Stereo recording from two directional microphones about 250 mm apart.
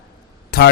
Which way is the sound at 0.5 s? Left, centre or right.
Left.